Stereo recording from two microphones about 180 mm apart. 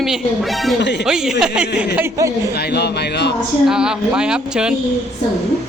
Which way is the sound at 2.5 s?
65° left (ahead or behind).